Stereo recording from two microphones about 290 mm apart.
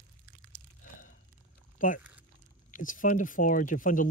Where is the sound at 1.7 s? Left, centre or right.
Left.